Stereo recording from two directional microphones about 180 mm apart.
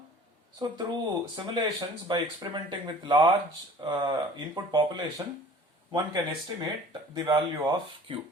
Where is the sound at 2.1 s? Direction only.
25° right (ahead or behind).